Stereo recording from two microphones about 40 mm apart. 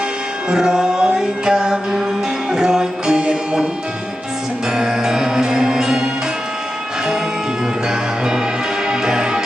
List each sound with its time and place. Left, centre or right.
0.5 s music: centre
4.8 s music: centre
7.9 s music: centre